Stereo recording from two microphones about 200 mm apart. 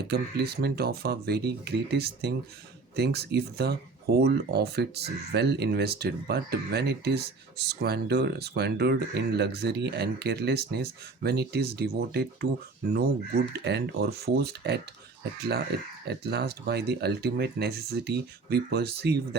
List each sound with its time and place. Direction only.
0.1 s speech: 55° right (ahead or behind)
13.5 s speech: 55° right (ahead or behind)